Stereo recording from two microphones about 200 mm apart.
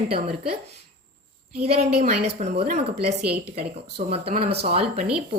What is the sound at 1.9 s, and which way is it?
Speech, 35° right (ahead or behind).